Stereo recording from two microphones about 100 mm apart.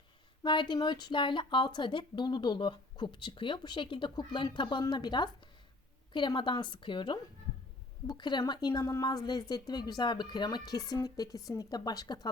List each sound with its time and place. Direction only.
0.4 s speech: 50° left (ahead or behind)
8.8 s speech: 35° left (ahead or behind)